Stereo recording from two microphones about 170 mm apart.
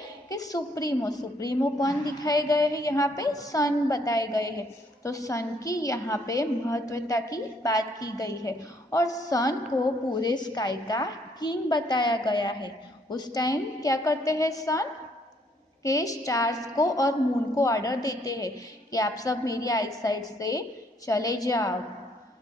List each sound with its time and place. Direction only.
0.3 s a woman's voice: 20° left (ahead or behind)